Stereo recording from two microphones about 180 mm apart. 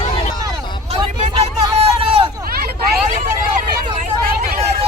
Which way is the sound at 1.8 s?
30° right (ahead or behind).